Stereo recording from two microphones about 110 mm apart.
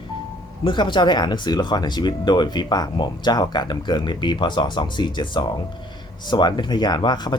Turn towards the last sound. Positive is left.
turn(degrees=40)  # may be behind; listen again after turning